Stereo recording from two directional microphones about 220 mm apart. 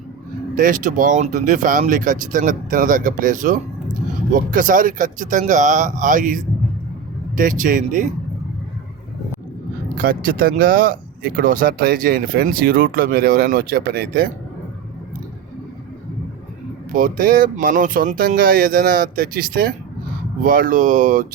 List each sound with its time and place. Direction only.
0.5 s speech: 35° right (ahead or behind)
10.0 s speech: 40° right (ahead or behind)
16.9 s speech: 40° right (ahead or behind)